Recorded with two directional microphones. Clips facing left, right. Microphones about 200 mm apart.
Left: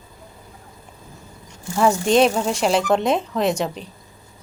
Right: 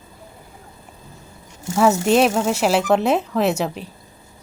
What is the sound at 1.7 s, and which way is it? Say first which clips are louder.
Speech: right 1 dB; 5° right (ahead or behind).